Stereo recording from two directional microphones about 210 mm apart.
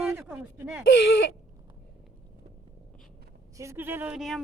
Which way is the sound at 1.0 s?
55° left (ahead or behind).